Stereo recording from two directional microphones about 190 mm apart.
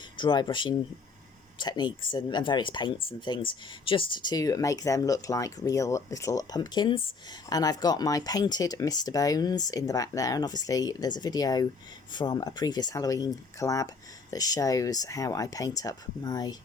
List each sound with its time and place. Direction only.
0.2 s speech: 25° left (ahead or behind)